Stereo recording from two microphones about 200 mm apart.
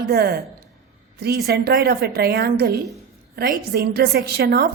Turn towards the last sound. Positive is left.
turn(degrees=-50)  # may be behind; listen again after turning